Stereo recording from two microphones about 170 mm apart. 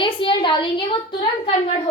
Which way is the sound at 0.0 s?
30° left (ahead or behind).